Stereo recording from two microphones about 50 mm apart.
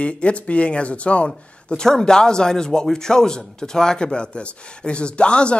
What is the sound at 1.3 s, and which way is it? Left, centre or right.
Speech, centre.